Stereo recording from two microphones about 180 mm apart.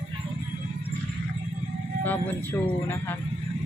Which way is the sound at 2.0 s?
10° left (ahead or behind).